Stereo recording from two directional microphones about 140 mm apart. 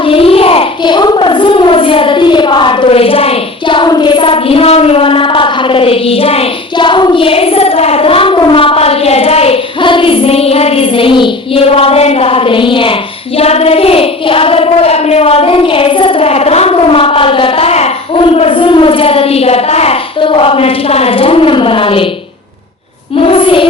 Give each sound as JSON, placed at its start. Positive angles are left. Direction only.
{"t": 0.0, "sound": "a sound", "side_deg": 40}
{"t": 18.3, "sound": "child singing", "side_deg": 40}
{"t": 23.2, "sound": "child singing", "side_deg": 40}